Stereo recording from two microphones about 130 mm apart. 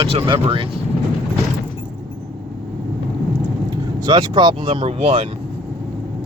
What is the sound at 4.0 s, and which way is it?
Speech, 35° right (ahead or behind).